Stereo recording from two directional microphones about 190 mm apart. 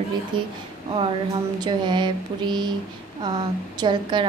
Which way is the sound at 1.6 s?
25° right (ahead or behind).